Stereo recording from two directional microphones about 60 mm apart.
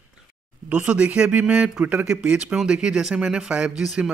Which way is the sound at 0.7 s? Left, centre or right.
Right.